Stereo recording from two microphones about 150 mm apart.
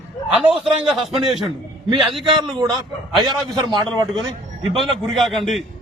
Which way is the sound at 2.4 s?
30° right (ahead or behind).